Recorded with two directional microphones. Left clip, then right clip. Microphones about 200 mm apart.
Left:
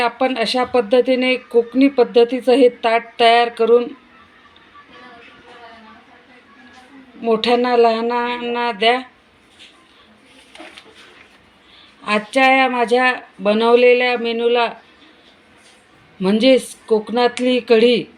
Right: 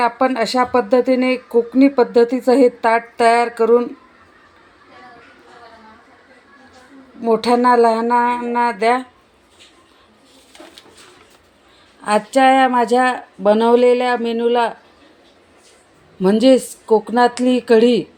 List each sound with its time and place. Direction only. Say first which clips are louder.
0.5 s speech: right 2 dB; 5° left (ahead or behind)
0.9 s speech: left 1 dB; 40° right (ahead or behind)
2.1 s speech: even; 15° right (ahead or behind)
7.4 s speech: right 1 dB; 15° right (ahead or behind)
12.0 s speech: right 2 dB; 15° right (ahead or behind)
16.2 s speech: right 1 dB; 15° right (ahead or behind)